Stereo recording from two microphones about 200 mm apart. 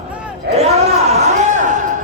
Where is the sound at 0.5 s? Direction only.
30° right (ahead or behind).